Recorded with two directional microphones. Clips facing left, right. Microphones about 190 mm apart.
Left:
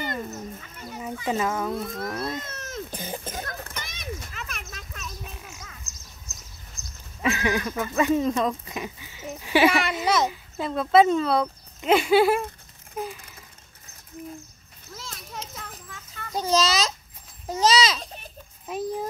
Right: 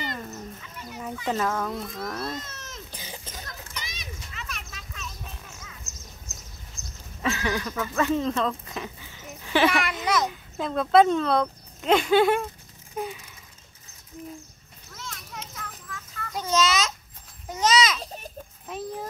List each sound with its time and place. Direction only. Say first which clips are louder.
0.0 s a sound: left 3 dB; 50° left (ahead or behind)
1.2 s speech: left 1 dB; 10° left (ahead or behind)
2.3 s a sound: left 4 dB; 55° left (ahead or behind)
6.8 s goat: right 2 dB; 15° left (ahead or behind)
7.2 s speech: left 3 dB; 10° left (ahead or behind)
9.4 s a sound: left 2 dB; 10° left (ahead or behind)
9.7 s a child's voice: left 2 dB; 25° left (ahead or behind)
10.2 s speech: left 2 dB; 5° left (ahead or behind)
12.9 s a sound: even; centre (ahead or behind)
15.0 s children playing: left 1 dB; 30° left (ahead or behind)
17.5 s babbling: left 1 dB; 30° left (ahead or behind)
18.0 s baby laughter: right 3 dB; 40° right (ahead or behind)